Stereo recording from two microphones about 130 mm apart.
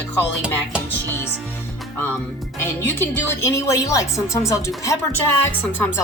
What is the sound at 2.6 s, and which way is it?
Speech, 15° left (ahead or behind).